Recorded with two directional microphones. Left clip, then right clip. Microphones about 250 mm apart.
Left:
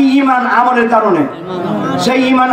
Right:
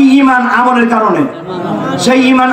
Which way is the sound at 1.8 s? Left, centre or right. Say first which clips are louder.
Right 3 dB; centre.